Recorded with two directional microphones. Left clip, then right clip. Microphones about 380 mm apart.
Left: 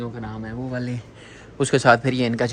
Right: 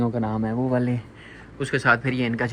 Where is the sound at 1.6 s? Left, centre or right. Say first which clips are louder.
Left 4 dB; centre.